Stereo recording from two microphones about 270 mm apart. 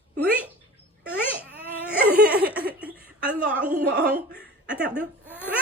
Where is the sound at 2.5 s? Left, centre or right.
Right.